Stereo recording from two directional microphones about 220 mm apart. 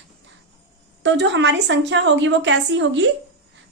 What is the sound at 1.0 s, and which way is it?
A woman's voice, 55° right (ahead or behind).